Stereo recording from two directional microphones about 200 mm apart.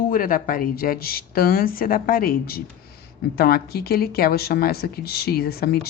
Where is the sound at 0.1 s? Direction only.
45° left (ahead or behind).